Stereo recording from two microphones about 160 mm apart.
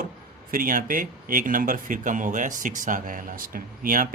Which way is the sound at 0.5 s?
60° right (ahead or behind).